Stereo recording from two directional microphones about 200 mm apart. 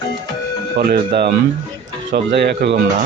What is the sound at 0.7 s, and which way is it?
Speech, 50° right (ahead or behind).